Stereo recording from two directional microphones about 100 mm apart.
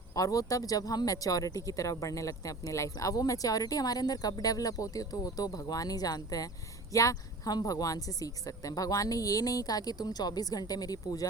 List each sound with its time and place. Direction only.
0.1 s speech: 35° left (ahead or behind)